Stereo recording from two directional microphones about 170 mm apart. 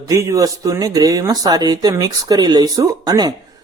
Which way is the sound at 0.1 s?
20° right (ahead or behind).